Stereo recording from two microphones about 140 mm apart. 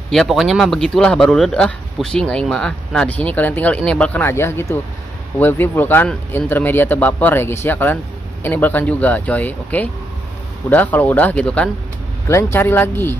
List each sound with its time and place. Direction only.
0.1 s speech: centre (ahead or behind)